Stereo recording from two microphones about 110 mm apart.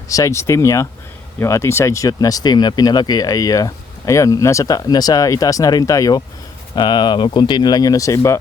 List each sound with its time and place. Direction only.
0.1 s speech: 30° left (ahead or behind)